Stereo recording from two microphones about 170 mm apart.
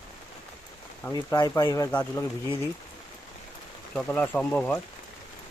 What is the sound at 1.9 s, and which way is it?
Speech, 10° left (ahead or behind).